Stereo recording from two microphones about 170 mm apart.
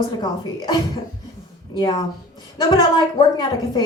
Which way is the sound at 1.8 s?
25° left (ahead or behind).